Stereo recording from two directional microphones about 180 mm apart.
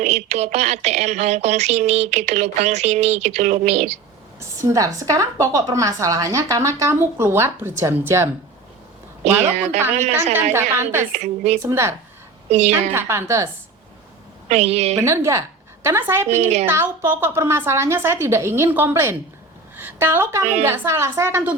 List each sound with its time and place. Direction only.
0.0 s speech: 35° right (ahead or behind)
4.4 s a woman's voice: 20° right (ahead or behind)
10.5 s a woman's voice: 15° right (ahead or behind)
11.1 s speech: 40° right (ahead or behind)
11.6 s a woman's voice: 15° right (ahead or behind)
12.5 s speech: 35° right (ahead or behind)
12.9 s a woman's voice: 15° right (ahead or behind)
14.4 s speech: 40° right (ahead or behind)
15.0 s a woman's voice: 15° right (ahead or behind)
16.4 s speech: 40° right (ahead or behind)
16.6 s a woman's voice: 15° right (ahead or behind)